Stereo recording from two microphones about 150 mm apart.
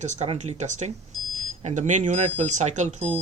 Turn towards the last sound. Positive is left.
turn(degrees=-45)  # may be behind; listen again after turning